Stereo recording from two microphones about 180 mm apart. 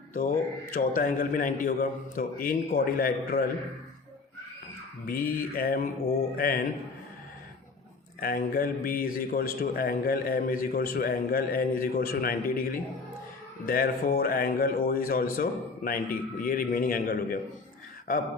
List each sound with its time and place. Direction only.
0.1 s speech: 50° left (ahead or behind)
5.0 s a man's voice: 55° left (ahead or behind)
8.2 s a man's voice: 55° left (ahead or behind)
13.7 s speech: 55° left (ahead or behind)